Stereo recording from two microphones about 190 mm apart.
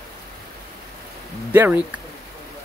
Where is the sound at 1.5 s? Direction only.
10° right (ahead or behind).